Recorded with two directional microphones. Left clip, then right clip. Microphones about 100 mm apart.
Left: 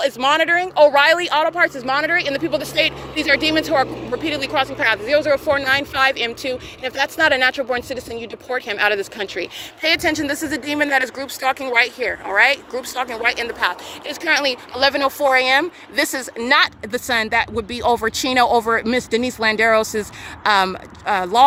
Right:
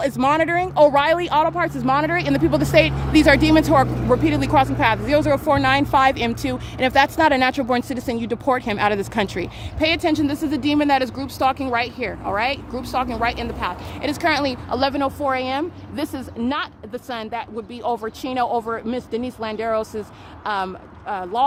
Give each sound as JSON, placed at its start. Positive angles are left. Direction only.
{"t": 0.3, "sound": "speech", "side_deg": -25}
{"t": 2.1, "sound": "speech", "side_deg": -60}
{"t": 5.6, "sound": "speech", "side_deg": -35}
{"t": 7.7, "sound": "speech", "side_deg": -60}
{"t": 9.8, "sound": "speech", "side_deg": 0}
{"t": 14.1, "sound": "speech", "side_deg": -5}
{"t": 14.8, "sound": "speech", "side_deg": 30}